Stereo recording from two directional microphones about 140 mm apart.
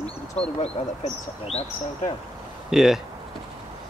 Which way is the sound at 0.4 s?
50° left (ahead or behind).